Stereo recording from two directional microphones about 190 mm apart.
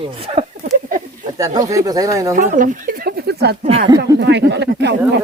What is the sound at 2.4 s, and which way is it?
Speech, 45° right (ahead or behind).